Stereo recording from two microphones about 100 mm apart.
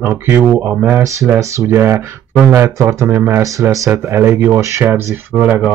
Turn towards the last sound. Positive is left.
turn(degrees=-10)  # may be behind; listen again after turning